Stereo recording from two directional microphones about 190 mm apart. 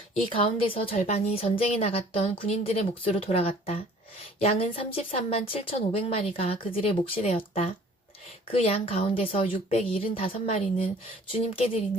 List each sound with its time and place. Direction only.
0.3 s a woman's voice: 30° left (ahead or behind)